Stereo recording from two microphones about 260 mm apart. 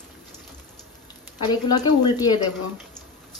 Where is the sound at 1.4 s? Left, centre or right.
Centre.